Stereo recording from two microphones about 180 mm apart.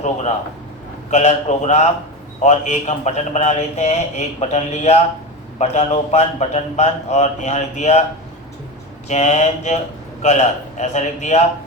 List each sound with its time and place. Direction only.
0.0 s speech: 35° left (ahead or behind)
9.0 s speech: 40° left (ahead or behind)